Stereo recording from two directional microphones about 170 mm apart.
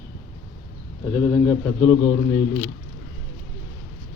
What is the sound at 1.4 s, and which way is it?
Speech, 15° left (ahead or behind).